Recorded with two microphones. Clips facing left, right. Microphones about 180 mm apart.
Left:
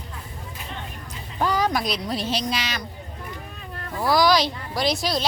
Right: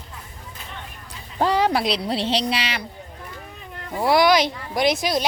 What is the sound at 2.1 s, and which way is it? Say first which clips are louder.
Speech: right 3 dB; 30° right (ahead or behind).